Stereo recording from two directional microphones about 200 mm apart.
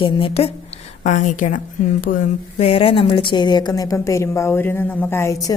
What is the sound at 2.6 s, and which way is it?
A woman's voice, 30° left (ahead or behind).